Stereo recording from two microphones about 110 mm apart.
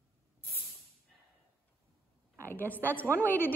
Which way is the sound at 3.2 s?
15° left (ahead or behind).